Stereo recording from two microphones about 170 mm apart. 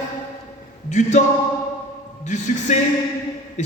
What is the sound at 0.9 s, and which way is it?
Speech, 45° left (ahead or behind).